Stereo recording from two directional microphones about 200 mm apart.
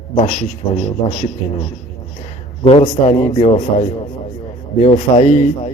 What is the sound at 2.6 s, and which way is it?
A man's voice, 30° left (ahead or behind).